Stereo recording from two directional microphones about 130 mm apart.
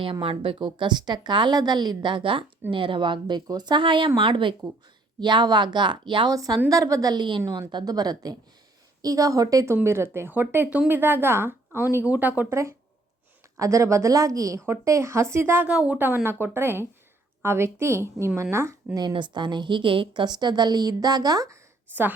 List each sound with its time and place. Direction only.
0.0 s a woman's voice: 40° right (ahead or behind); by 18.8 s 20° right (ahead or behind)
18.9 s a woman's voice: 35° right (ahead or behind); by 22.1 s 20° right (ahead or behind)